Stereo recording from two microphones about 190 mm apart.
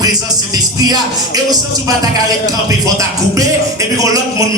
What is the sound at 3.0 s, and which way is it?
Music, 15° right (ahead or behind).